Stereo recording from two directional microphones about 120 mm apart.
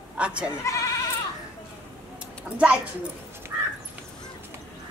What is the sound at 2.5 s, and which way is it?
Speech, 10° right (ahead or behind).